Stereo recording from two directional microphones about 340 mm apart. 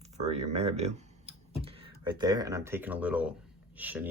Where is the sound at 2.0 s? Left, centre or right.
Centre.